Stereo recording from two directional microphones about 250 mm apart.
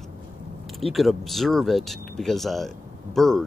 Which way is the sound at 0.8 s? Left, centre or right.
Centre.